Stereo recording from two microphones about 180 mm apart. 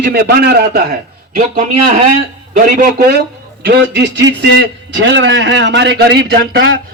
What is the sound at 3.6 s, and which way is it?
A man's voice, 65° right (ahead or behind).